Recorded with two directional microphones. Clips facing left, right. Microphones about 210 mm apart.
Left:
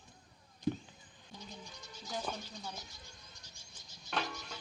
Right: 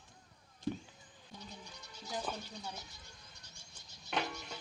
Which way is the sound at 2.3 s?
Centre (ahead or behind).